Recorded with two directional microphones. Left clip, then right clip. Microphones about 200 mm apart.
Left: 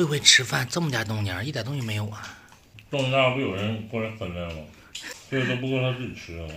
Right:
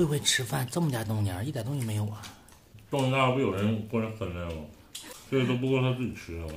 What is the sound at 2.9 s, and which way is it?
Speech, 15° right (ahead or behind).